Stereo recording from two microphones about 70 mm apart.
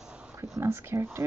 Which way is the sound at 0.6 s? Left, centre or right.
Right.